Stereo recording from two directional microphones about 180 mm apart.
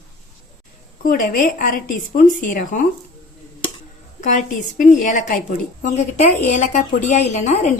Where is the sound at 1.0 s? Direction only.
50° left (ahead or behind).